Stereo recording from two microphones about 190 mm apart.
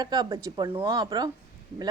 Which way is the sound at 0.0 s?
20° right (ahead or behind).